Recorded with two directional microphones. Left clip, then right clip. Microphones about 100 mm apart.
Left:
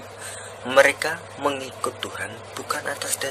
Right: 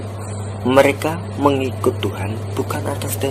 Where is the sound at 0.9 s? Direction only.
20° left (ahead or behind).